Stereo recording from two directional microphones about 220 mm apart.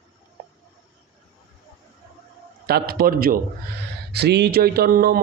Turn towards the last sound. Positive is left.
turn(degrees=-40)  # may be behind; listen again after turning